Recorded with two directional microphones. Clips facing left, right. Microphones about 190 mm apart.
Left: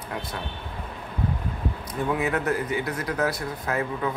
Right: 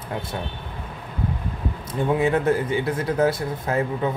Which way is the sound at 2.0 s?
30° right (ahead or behind).